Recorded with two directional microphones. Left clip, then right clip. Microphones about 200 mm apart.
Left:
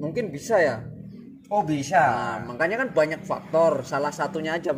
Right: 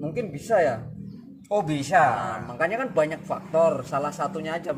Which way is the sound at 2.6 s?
25° left (ahead or behind).